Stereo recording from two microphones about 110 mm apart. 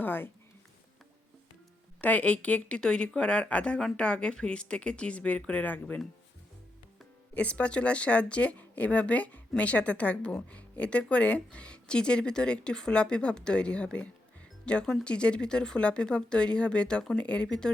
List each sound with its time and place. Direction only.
0.0 s speech: 20° left (ahead or behind)
2.0 s speech: 15° left (ahead or behind)
7.3 s speech: 10° left (ahead or behind)